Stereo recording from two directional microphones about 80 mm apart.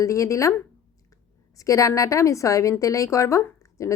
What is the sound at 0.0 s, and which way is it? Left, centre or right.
Speech, left.